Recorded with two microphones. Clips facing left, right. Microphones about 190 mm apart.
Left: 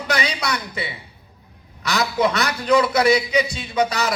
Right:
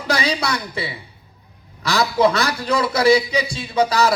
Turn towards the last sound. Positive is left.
turn(degrees=-30)  # may be behind; listen again after turning